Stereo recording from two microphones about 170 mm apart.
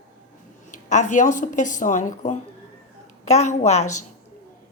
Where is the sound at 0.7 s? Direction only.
45° left (ahead or behind).